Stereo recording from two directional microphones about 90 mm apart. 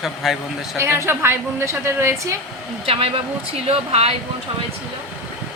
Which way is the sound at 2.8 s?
90° right.